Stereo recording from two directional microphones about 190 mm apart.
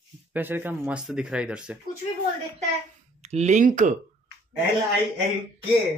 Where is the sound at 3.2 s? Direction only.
35° right (ahead or behind).